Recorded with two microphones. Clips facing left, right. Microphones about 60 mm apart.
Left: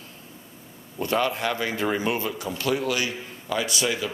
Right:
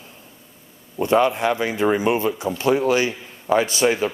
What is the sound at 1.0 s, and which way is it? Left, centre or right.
A man's voice, right.